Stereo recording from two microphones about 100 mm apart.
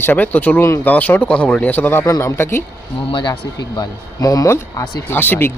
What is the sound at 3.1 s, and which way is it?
A man's voice, 50° left (ahead or behind).